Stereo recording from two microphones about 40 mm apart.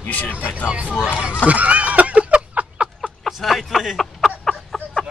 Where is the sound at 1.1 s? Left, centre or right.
Right.